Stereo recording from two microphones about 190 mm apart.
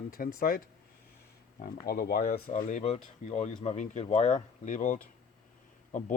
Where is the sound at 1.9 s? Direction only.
50° left (ahead or behind).